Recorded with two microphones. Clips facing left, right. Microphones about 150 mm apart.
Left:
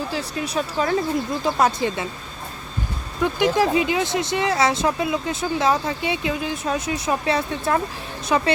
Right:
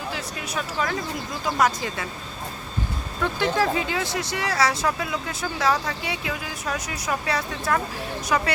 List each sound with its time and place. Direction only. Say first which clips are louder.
0.1 s speech: left 5 dB; 30° left (ahead or behind)
3.2 s speech: left 4 dB; 15° left (ahead or behind)